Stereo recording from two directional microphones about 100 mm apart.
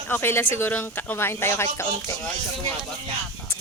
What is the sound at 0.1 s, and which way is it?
A man's voice, 20° left (ahead or behind).